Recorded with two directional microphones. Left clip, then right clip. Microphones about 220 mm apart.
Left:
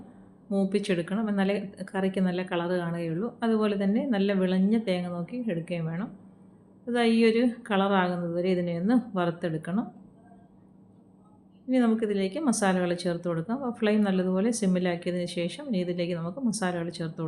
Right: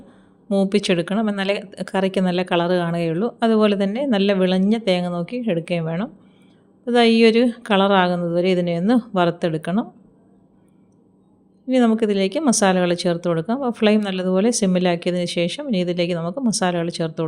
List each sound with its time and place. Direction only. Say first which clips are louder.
0.4 s speech: right 9 dB; 40° right (ahead or behind)
11.7 s speech: right 8 dB; 45° right (ahead or behind)